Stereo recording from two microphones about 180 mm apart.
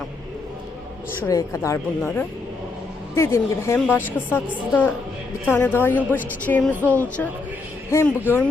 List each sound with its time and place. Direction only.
1.3 s a woman's voice: 15° left (ahead or behind)